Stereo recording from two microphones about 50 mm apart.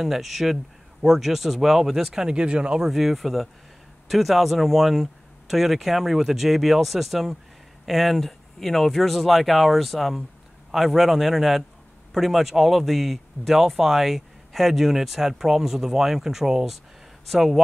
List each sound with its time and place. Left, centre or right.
0.0 s speech: centre
2.2 s speech: right
2.9 s speech: centre